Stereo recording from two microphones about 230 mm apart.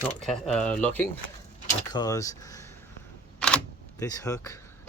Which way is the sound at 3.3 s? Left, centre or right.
Centre.